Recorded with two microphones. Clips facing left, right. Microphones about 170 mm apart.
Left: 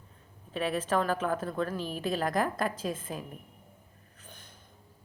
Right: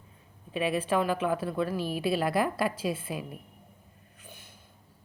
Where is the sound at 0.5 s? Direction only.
10° right (ahead or behind).